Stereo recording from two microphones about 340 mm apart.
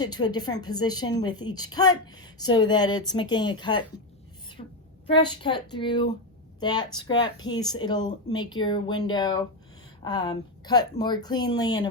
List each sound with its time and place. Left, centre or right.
0.0 s a woman's voice: centre
4.6 s a sound: centre
5.1 s a woman's voice: centre